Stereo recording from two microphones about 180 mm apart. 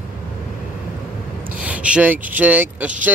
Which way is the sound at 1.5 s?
5° right (ahead or behind).